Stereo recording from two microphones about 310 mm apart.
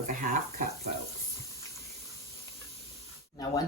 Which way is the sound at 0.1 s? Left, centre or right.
Right.